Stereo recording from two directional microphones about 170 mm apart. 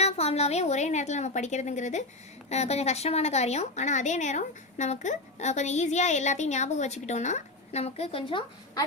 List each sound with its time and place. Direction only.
0.0 s a woman's voice: 40° left (ahead or behind)